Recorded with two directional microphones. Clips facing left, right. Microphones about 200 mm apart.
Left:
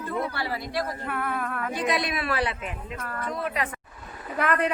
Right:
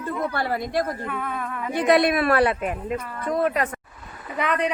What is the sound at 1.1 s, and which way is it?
Speech, 5° left (ahead or behind).